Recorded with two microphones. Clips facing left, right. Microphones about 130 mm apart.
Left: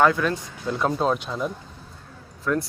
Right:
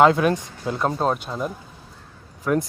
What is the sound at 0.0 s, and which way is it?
Speech, 20° right (ahead or behind).